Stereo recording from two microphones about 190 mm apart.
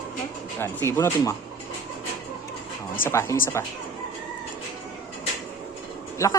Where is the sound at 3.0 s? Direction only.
15° left (ahead or behind).